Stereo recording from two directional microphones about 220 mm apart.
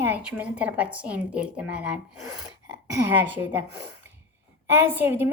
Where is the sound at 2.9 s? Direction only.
10° right (ahead or behind).